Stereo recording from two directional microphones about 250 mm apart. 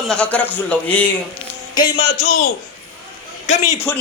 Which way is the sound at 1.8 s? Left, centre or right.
Centre.